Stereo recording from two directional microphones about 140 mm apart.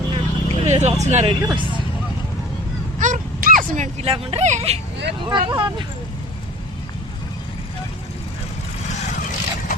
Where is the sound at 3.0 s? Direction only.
70° right (ahead or behind).